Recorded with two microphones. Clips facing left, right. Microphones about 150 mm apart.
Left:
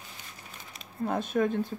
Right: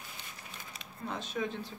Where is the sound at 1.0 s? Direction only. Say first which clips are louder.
Left 9 dB; 55° left (ahead or behind).